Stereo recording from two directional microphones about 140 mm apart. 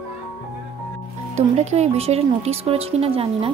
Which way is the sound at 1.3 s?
55° right (ahead or behind).